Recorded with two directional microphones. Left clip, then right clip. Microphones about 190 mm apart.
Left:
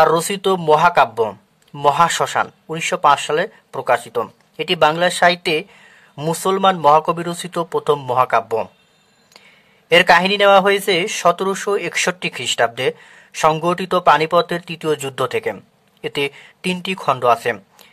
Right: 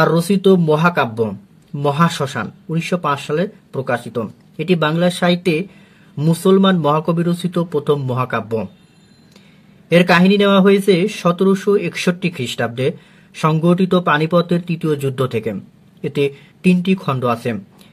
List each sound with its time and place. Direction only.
0.0 s speech: 35° left (ahead or behind)
9.8 s speech: 30° left (ahead or behind)